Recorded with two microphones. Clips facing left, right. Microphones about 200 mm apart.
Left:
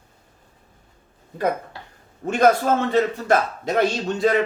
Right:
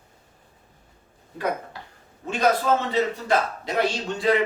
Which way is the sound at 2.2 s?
50° left (ahead or behind).